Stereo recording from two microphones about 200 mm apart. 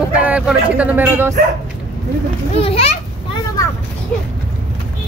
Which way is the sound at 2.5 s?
30° left (ahead or behind).